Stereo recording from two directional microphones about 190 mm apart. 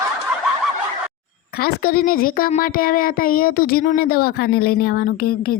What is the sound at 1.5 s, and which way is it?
A woman's voice, 55° left (ahead or behind).